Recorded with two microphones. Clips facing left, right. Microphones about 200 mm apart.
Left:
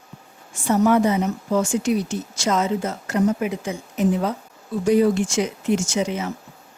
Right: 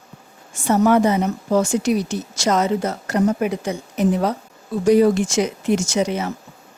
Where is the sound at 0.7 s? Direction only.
75° right (ahead or behind).